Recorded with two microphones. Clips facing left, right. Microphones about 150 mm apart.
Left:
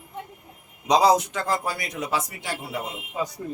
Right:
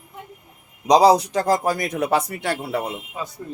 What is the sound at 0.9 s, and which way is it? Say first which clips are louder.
Speech: right 5 dB; 35° right (ahead or behind).